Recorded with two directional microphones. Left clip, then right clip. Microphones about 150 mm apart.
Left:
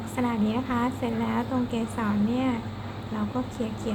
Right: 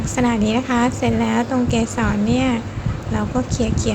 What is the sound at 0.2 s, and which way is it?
A woman's voice, 25° right (ahead or behind).